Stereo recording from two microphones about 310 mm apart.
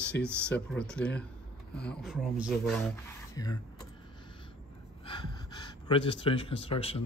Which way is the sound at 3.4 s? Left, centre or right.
Centre.